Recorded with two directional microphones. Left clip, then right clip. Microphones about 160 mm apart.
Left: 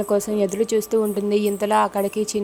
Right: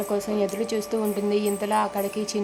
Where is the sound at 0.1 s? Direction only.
30° left (ahead or behind).